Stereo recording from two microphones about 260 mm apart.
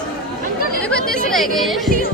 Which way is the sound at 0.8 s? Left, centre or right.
Centre.